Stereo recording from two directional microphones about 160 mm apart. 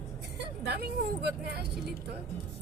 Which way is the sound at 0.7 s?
90° right.